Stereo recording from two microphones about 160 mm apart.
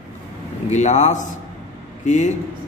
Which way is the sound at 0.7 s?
45° left (ahead or behind).